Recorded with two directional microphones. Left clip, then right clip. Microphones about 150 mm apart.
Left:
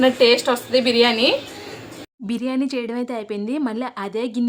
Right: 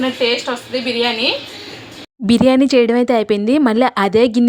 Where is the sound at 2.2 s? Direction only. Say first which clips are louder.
Right 12 dB; 45° right (ahead or behind).